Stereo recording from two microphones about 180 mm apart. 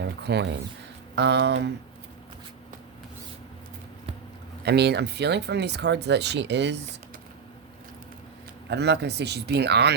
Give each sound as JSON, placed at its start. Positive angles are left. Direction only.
{"t": 0.0, "sound": "speech", "side_deg": -70}
{"t": 4.6, "sound": "speech", "side_deg": -65}
{"t": 8.7, "sound": "speech", "side_deg": -70}